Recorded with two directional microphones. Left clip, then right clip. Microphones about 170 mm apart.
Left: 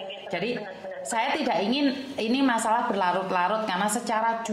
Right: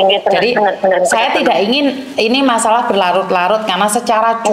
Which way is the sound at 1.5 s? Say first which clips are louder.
Right 13 dB; 45° right (ahead or behind).